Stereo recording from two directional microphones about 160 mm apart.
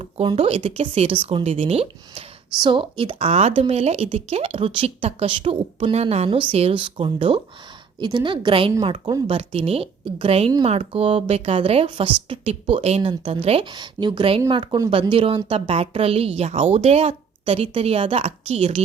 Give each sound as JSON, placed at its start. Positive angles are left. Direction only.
{"t": 0.0, "sound": "a woman's voice", "side_deg": -35}